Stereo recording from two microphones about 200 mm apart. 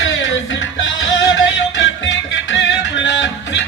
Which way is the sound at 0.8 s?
70° left (ahead or behind).